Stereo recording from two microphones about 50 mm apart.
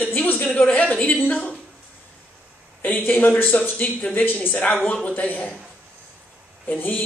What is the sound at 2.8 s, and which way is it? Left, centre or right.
A man's voice, left.